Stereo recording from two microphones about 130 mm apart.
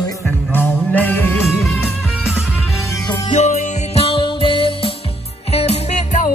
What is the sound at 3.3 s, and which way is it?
Music, 55° left (ahead or behind).